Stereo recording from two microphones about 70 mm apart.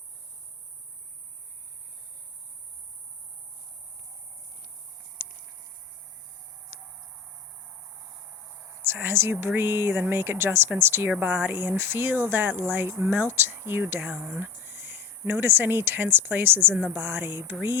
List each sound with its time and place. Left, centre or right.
8.8 s speech: right